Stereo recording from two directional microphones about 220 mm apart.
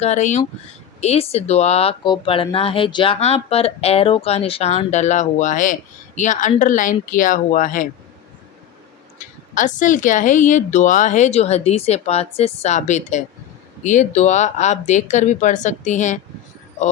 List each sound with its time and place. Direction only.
0.0 s a woman's voice: 30° left (ahead or behind)
9.6 s a woman's voice: 35° left (ahead or behind)